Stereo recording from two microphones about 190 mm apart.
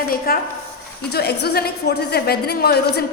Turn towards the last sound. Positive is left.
turn(degrees=55)  # may be behind; listen again after turning